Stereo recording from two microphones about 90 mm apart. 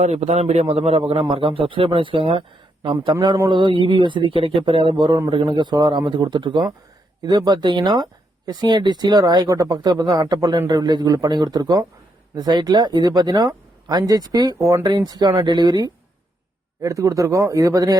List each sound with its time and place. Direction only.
0.7 s a man's voice: 90° right
3.5 s speech: 65° right (ahead or behind)
5.3 s a man's voice: 90° right
5.5 s speech: 55° right (ahead or behind)
14.6 s speech: 35° right (ahead or behind)
14.8 s speech: 50° right (ahead or behind)
16.8 s speech: 35° right (ahead or behind)